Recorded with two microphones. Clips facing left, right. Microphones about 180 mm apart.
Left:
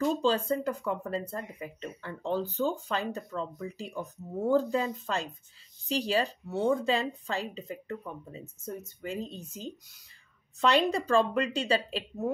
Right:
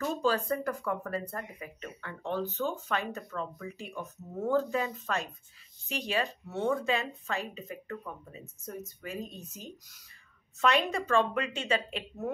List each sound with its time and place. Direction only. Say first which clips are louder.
0.0 s speech: left 3 dB; 25° left (ahead or behind)